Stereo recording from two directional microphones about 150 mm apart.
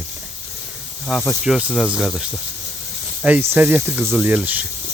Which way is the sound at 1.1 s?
Centre (ahead or behind).